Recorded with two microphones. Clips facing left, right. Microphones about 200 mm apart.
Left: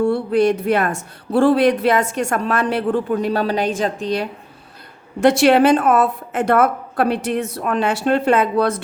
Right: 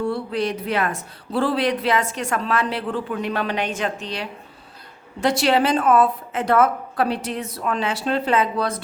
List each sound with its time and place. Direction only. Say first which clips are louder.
0.0 s a woman's voice: left 7 dB; 50° left (ahead or behind)
5.2 s a woman's voice: left 6 dB; 55° left (ahead or behind)